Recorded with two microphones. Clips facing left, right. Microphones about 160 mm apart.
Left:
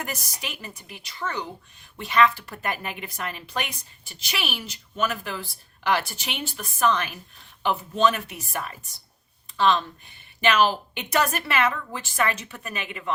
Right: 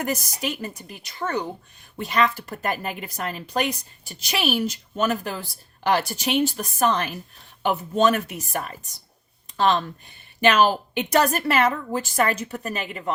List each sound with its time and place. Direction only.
0.0 s a woman's voice: 40° right (ahead or behind)